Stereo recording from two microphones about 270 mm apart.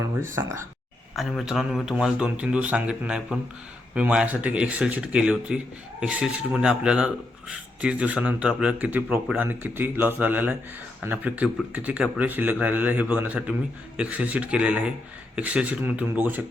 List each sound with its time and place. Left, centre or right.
0.2 s speech: centre